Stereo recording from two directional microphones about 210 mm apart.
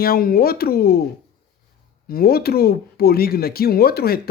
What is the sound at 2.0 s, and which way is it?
A man's voice, 45° left (ahead or behind).